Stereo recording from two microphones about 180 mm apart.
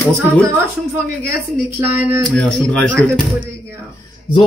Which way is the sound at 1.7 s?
15° right (ahead or behind).